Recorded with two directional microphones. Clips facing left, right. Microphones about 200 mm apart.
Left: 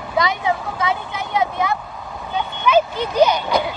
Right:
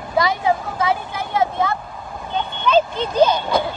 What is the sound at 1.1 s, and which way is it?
Vehicle, 20° left (ahead or behind).